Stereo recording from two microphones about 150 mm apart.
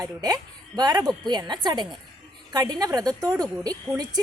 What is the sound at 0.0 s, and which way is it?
A woman's voice, 25° right (ahead or behind).